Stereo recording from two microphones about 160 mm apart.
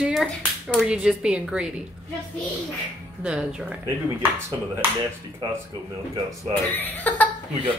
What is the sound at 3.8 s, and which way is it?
Speech, 15° right (ahead or behind).